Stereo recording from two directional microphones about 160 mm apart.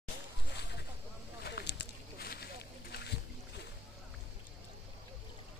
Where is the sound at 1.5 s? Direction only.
90° left.